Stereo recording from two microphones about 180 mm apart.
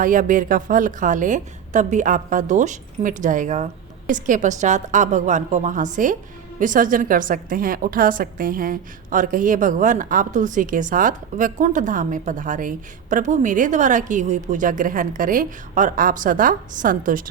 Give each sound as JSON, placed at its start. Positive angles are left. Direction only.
{"t": 0.0, "sound": "a woman's voice", "side_deg": -45}